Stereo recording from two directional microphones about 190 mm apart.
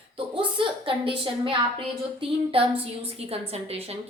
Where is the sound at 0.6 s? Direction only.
25° right (ahead or behind).